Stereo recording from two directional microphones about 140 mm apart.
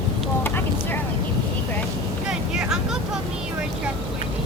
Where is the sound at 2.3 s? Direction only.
5° right (ahead or behind).